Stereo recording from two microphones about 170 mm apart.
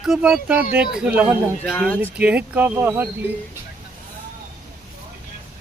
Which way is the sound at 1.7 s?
10° left (ahead or behind).